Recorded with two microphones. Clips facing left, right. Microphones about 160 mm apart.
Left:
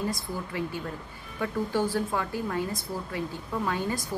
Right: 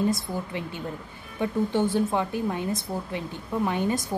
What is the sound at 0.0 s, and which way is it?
Speech, 20° right (ahead or behind).